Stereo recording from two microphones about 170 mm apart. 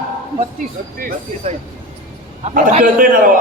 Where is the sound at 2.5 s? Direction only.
55° right (ahead or behind).